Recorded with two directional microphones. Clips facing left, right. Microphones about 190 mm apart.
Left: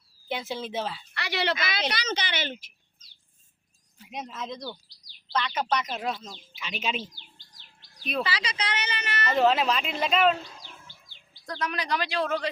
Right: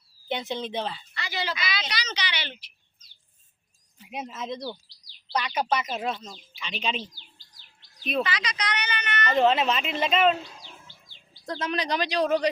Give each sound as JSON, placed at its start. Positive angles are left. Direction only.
{"t": 0.3, "sound": "speech", "side_deg": 0}
{"t": 1.1, "sound": "a woman's voice", "side_deg": 70}
{"t": 4.1, "sound": "speech", "side_deg": -5}
{"t": 8.2, "sound": "a woman's voice", "side_deg": 30}
{"t": 9.3, "sound": "speech", "side_deg": 0}
{"t": 11.4, "sound": "speech", "side_deg": -25}